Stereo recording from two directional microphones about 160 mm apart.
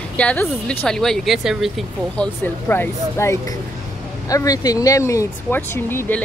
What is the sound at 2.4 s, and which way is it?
Speech, 15° left (ahead or behind).